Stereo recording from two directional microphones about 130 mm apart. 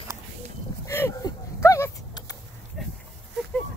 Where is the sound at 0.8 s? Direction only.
20° left (ahead or behind).